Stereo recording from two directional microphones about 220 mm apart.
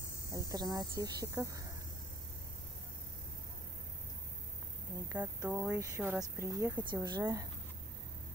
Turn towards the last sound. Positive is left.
turn(degrees=-15)  # may be behind; listen again after turning